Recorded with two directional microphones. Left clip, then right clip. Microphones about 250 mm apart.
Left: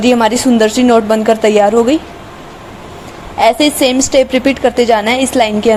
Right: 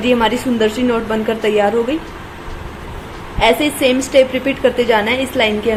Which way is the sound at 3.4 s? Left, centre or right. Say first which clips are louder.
Left 4 dB; left.